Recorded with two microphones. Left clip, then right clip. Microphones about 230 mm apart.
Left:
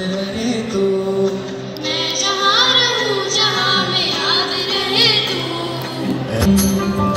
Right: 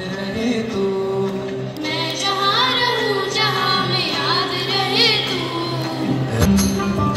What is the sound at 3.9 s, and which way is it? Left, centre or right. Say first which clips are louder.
Music: left 2 dB; right.